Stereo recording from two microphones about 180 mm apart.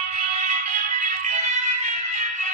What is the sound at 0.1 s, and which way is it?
Music, 40° right (ahead or behind).